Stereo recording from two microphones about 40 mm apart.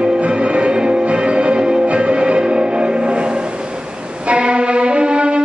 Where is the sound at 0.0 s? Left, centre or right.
Right.